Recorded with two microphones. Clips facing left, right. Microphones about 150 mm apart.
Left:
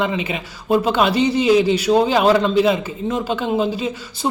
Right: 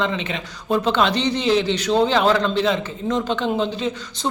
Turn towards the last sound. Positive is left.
turn(degrees=10)  # may be behind; listen again after turning